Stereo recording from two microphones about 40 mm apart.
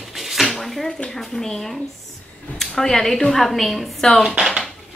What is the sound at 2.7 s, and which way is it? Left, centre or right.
Speech, centre.